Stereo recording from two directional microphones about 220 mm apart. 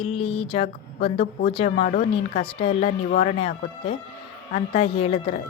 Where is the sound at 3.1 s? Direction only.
35° left (ahead or behind).